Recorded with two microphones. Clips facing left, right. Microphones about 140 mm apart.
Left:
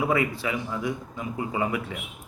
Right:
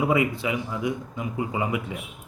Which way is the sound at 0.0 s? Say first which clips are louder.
Right 2 dB; 15° right (ahead or behind).